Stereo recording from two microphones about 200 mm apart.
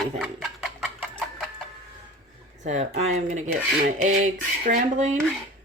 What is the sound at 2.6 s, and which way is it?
Speech, 35° right (ahead or behind).